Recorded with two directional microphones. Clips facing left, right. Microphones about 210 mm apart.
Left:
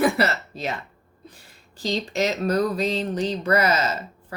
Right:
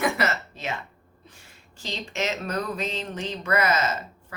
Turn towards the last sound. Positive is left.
turn(degrees=35)  # may be behind; listen again after turning